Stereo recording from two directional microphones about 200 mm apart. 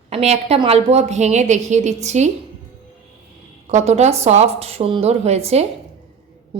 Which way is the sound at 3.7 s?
35° right (ahead or behind).